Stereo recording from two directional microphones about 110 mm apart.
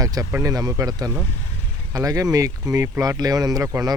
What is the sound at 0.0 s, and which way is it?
Speech, 35° right (ahead or behind).